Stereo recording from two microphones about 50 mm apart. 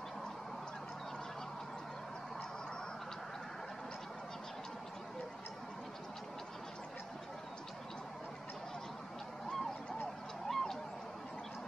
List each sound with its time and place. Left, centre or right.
10.5 s fowl: centre